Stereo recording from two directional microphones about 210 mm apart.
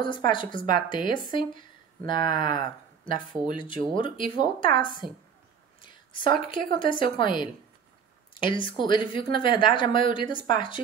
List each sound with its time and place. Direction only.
0.0 s a woman's voice: 25° left (ahead or behind)